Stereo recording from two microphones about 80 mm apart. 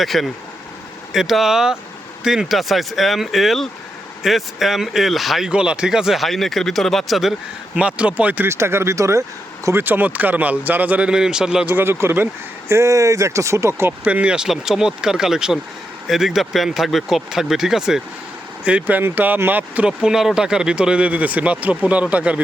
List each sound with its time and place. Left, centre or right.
0.0 s speech: centre
5.5 s speech: centre
7.8 s speech: centre
8.4 s speech: right
9.7 s speech: right; by 11.6 s centre
11.7 s speech: right
14.1 s speech: centre
18.6 s speech: centre
20.0 s speech: centre